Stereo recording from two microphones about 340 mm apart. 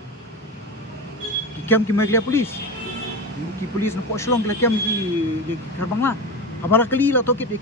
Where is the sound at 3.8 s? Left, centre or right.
Centre.